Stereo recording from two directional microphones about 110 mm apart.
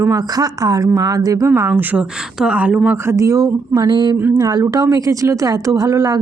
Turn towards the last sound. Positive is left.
turn(degrees=-30)  # may be behind; listen again after turning